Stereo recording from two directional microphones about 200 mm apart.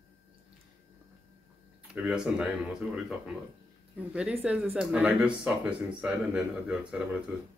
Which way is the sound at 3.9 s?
5° right (ahead or behind).